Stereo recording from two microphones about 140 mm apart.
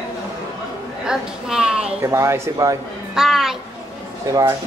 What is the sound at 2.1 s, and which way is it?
Speech, 20° right (ahead or behind).